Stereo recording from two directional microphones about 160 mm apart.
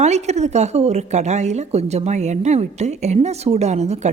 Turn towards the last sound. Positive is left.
turn(degrees=-45)  # may be behind; listen again after turning